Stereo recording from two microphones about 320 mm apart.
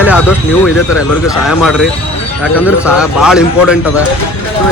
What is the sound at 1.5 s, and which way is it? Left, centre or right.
A man's voice, centre.